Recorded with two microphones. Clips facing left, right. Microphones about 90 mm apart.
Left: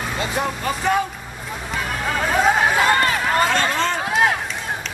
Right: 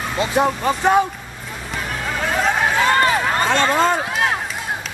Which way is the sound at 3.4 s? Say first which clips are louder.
Right 2 dB; 25° right (ahead or behind).